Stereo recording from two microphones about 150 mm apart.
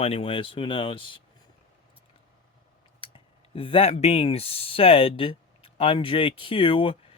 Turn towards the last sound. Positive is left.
turn(degrees=35)  # may be behind; listen again after turning